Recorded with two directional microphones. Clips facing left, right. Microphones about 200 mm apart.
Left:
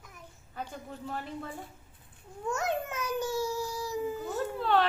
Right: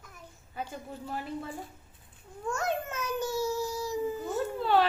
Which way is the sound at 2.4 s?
20° left (ahead or behind).